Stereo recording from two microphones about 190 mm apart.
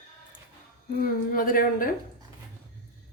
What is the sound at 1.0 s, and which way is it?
Speech, 50° left (ahead or behind).